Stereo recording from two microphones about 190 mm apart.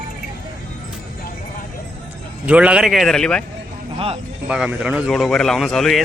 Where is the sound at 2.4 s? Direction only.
5° right (ahead or behind).